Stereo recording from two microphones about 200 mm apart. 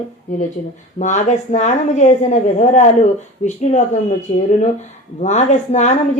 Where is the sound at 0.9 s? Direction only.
35° left (ahead or behind).